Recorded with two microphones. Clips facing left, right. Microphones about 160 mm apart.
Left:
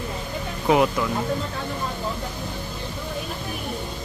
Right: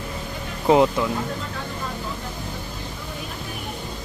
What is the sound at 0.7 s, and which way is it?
Speech, 25° right (ahead or behind).